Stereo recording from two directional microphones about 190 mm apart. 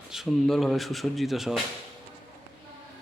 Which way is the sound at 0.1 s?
Centre (ahead or behind).